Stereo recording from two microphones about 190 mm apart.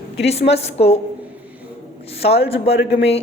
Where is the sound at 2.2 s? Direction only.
30° left (ahead or behind).